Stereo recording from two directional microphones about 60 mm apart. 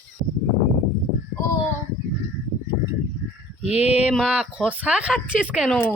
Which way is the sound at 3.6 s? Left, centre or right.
Right.